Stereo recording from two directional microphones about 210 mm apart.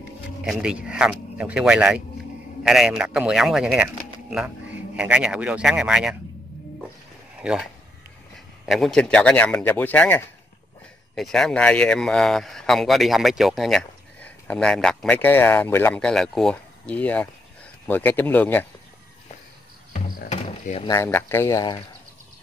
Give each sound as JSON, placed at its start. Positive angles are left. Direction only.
{"t": 0.5, "sound": "speech", "side_deg": -5}
{"t": 7.4, "sound": "speech", "side_deg": -5}
{"t": 8.6, "sound": "speech", "side_deg": 0}
{"t": 19.9, "sound": "music", "side_deg": 35}
{"t": 20.9, "sound": "speech", "side_deg": 10}